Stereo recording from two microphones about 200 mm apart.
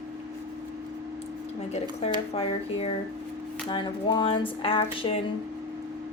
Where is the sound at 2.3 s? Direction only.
30° left (ahead or behind).